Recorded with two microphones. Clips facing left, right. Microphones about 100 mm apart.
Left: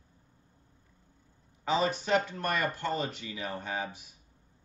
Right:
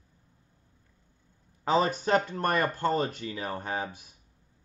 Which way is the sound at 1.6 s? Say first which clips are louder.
Right 3 dB; 40° right (ahead or behind).